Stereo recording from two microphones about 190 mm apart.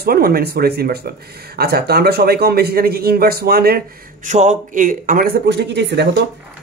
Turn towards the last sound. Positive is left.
turn(degrees=-60)  # may be behind; listen again after turning